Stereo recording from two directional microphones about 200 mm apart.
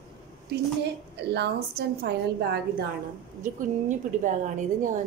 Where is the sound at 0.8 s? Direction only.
55° right (ahead or behind).